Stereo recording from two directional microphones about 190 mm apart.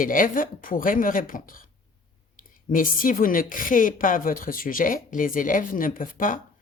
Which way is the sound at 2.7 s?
45° left (ahead or behind).